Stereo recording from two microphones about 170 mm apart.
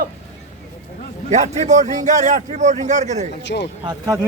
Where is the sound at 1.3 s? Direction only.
45° right (ahead or behind).